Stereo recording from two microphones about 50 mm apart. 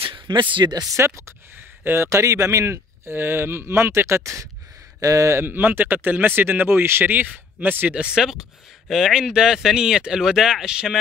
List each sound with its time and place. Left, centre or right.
0.9 s speech: right
1.6 s a sound: right
2.0 s a man's voice: right
5.4 s speech: right
7.2 s speech: right
7.9 s speech: centre